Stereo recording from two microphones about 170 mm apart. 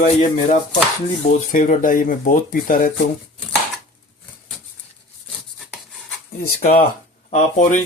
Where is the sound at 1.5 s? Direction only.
50° left (ahead or behind).